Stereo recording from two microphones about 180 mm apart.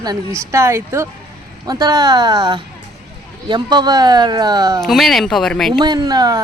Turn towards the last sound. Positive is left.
turn(degrees=-20)  # may be behind; listen again after turning